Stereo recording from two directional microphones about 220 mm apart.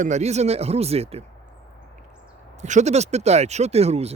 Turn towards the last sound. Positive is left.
turn(degrees=-30)  # may be behind; listen again after turning